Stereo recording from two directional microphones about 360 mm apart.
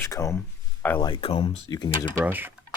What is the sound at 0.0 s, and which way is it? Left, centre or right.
Speech, centre.